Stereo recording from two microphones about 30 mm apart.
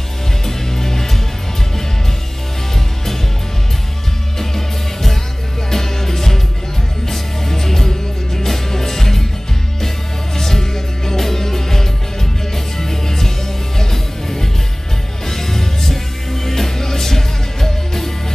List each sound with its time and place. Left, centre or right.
0.5 s music: centre
4.4 s music: centre
10.3 s music: centre
15.2 s music: centre